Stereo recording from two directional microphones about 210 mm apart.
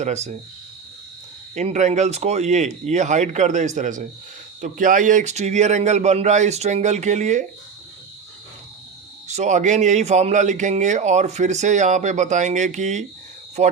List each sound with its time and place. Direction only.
0.0 s speech: 30° right (ahead or behind)
1.5 s speech: 35° right (ahead or behind)
9.2 s speech: 35° right (ahead or behind)